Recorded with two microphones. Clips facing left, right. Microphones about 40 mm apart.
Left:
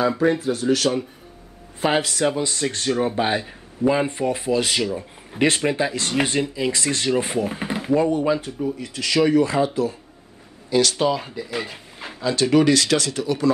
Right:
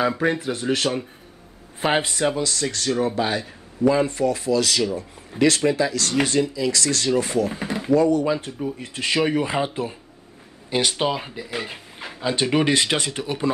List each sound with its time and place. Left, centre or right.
0.4 s speech: right
1.8 s speech: right
2.4 s speech: left
7.9 s speech: left
8.5 s speech: centre
8.7 s speech: right; by 12.2 s centre
12.2 s speech: right